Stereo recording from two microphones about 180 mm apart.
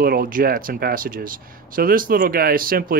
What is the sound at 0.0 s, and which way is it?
Speech, 50° right (ahead or behind).